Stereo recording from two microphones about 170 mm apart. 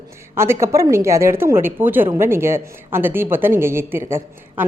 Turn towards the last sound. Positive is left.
turn(degrees=-15)  # may be behind; listen again after turning